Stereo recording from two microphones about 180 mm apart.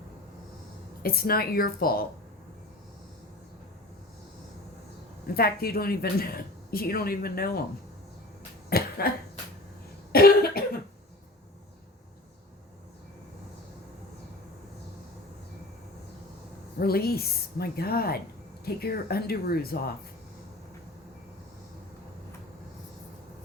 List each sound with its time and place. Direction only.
1.0 s speech: 55° left (ahead or behind)
5.3 s speech: 60° left (ahead or behind)
8.7 s cough: 60° left (ahead or behind)
10.1 s cough: 55° left (ahead or behind)
16.8 s speech: 60° left (ahead or behind)